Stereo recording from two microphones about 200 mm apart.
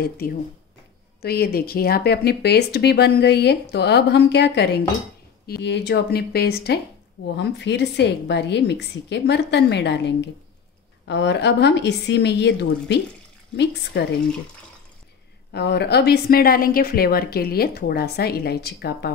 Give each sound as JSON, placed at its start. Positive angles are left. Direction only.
{"t": 0.0, "sound": "a woman's voice", "side_deg": 50}
{"t": 15.5, "sound": "a woman's voice", "side_deg": 55}